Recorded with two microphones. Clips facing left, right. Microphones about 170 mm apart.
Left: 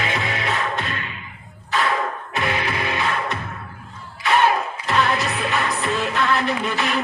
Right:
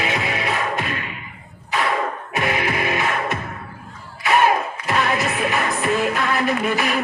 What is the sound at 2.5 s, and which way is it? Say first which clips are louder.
Music: right 2 dB; 15° right (ahead or behind).